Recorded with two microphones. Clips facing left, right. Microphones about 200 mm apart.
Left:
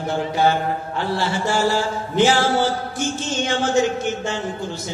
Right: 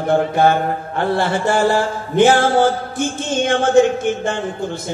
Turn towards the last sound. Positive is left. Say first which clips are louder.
# right 4 dB
turn(degrees=-55)  # may be behind; listen again after turning